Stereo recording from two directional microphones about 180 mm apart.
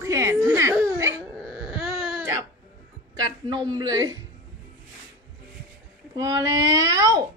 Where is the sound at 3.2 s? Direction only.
25° right (ahead or behind).